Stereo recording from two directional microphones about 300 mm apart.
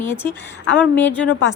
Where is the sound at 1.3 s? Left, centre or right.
Left.